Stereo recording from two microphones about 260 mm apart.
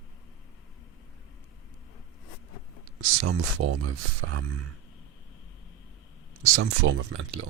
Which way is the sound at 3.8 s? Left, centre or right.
Right.